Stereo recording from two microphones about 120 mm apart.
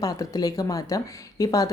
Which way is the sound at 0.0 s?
30° left (ahead or behind).